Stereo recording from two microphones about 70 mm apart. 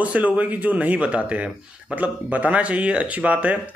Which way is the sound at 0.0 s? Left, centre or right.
Right.